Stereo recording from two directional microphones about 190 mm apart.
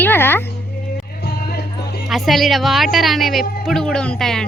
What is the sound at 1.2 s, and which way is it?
Music, 55° left (ahead or behind).